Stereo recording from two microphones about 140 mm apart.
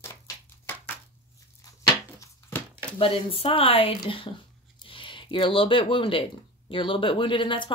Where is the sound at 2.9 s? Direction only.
40° left (ahead or behind).